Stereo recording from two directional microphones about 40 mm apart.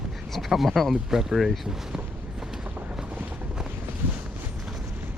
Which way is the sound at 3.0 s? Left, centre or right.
Right.